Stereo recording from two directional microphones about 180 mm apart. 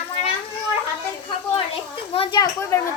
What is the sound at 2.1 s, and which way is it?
Speech, 30° left (ahead or behind).